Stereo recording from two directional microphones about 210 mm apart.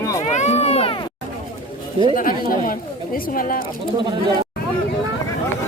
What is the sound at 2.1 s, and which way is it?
Speech, 40° left (ahead or behind).